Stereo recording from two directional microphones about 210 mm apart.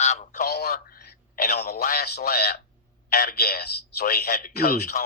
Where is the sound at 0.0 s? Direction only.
35° left (ahead or behind).